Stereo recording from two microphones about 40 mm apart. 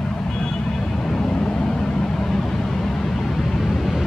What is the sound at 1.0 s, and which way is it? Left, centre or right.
Vehicle, left.